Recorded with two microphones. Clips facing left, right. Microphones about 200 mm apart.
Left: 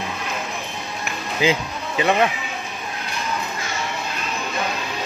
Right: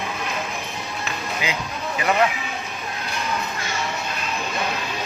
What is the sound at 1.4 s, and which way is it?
Speech, 25° left (ahead or behind).